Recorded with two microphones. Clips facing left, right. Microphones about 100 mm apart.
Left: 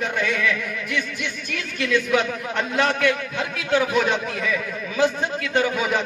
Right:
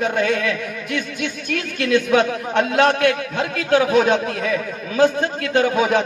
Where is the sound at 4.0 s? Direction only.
45° right (ahead or behind).